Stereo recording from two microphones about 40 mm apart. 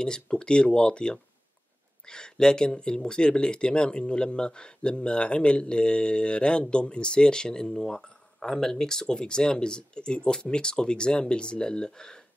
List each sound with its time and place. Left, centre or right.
0.0 s speech: centre